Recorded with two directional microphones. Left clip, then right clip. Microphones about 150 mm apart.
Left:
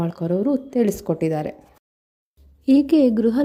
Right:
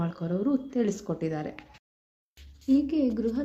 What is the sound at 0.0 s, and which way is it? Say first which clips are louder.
Speech: left 8 dB; 45° left (ahead or behind).